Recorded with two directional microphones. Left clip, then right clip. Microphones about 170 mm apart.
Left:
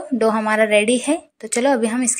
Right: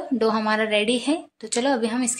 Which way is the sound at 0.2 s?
15° left (ahead or behind).